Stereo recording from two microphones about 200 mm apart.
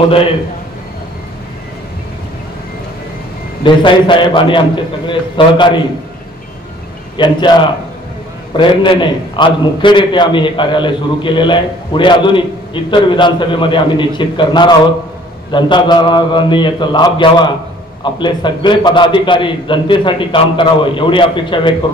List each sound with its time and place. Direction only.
3.6 s a man's voice: 25° left (ahead or behind)
7.2 s a man's voice: 25° left (ahead or behind)